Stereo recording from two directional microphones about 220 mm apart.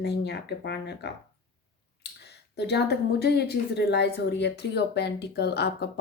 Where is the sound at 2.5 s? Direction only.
50° left (ahead or behind).